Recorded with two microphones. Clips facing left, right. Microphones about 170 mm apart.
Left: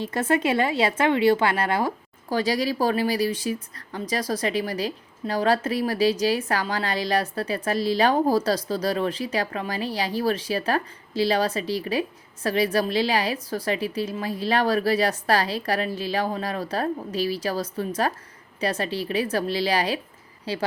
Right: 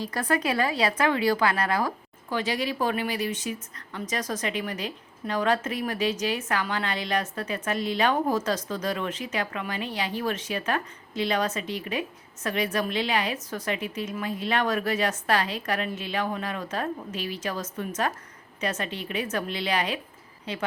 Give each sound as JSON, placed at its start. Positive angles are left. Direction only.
{"t": 0.0, "sound": "speech", "side_deg": 25}